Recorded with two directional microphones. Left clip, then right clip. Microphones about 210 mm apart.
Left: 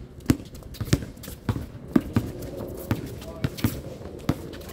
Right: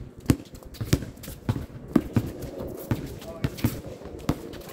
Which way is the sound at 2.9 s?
55° left (ahead or behind).